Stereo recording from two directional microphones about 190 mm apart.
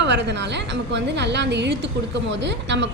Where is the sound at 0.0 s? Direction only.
65° right (ahead or behind).